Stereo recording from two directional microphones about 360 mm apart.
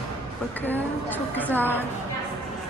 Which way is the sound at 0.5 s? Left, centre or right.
Centre.